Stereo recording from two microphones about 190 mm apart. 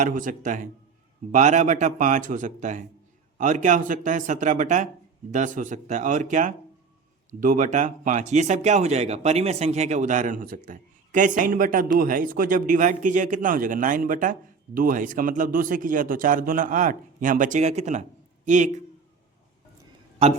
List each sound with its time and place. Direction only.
0.0 s a man's voice: 45° right (ahead or behind)